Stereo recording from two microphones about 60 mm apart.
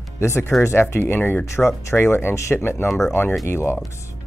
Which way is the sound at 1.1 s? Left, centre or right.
Left.